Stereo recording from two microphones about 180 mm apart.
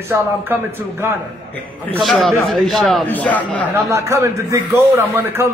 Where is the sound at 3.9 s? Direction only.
15° right (ahead or behind).